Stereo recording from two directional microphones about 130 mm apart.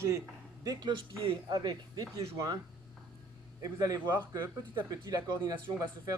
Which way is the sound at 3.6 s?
30° right (ahead or behind).